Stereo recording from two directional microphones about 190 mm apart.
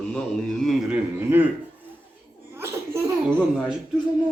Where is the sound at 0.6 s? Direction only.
Centre (ahead or behind).